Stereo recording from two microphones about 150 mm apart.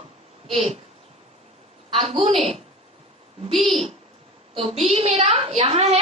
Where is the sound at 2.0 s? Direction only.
40° right (ahead or behind).